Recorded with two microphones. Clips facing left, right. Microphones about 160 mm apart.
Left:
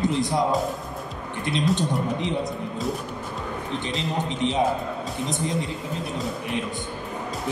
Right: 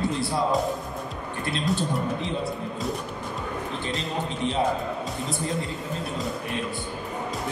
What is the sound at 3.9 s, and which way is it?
Speech, 20° left (ahead or behind).